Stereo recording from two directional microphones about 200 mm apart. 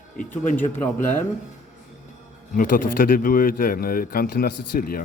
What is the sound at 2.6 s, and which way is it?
Speech, 45° left (ahead or behind).